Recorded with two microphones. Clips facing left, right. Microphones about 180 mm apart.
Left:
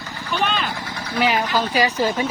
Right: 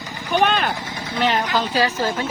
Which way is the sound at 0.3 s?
55° right (ahead or behind).